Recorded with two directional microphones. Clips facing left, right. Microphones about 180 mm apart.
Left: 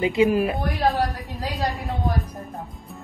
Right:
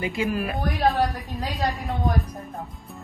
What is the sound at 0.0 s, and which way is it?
Speech, 25° left (ahead or behind).